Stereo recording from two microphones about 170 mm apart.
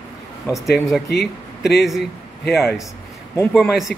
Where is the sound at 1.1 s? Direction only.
75° left (ahead or behind).